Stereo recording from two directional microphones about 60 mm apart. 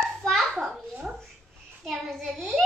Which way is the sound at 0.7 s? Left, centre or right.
Centre.